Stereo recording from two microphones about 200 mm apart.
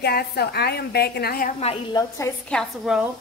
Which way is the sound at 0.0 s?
50° left (ahead or behind).